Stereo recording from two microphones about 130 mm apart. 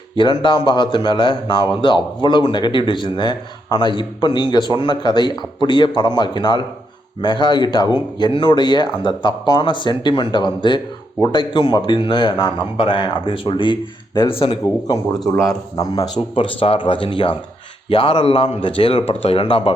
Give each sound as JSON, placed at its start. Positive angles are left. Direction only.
{"t": 0.2, "sound": "speech", "side_deg": 35}
{"t": 15.4, "sound": "a man's voice", "side_deg": 25}
{"t": 16.3, "sound": "speech", "side_deg": 45}